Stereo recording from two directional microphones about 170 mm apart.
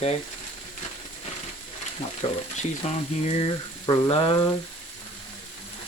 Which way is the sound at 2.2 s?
40° left (ahead or behind).